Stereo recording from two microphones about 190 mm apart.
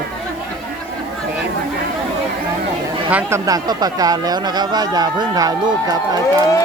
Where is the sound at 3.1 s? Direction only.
10° right (ahead or behind).